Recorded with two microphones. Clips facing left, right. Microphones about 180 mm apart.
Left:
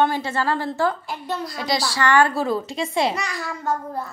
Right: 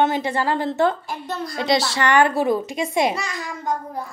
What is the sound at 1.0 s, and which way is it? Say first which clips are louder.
Speech: even; 45° right (ahead or behind).